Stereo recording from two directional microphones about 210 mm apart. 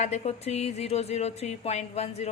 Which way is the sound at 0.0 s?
30° left (ahead or behind).